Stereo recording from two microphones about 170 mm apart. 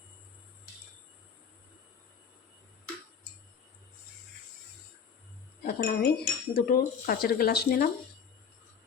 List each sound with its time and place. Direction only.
5.6 s speech: 65° left (ahead or behind)